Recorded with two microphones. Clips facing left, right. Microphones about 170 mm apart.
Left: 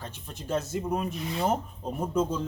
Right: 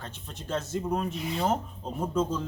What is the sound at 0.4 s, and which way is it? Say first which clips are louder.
A man's voice: left 1 dB; 10° left (ahead or behind).